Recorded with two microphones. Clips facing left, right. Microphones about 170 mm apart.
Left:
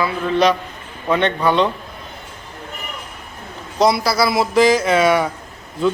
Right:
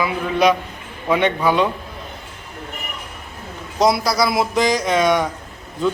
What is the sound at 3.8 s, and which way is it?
A man's voice, centre (ahead or behind).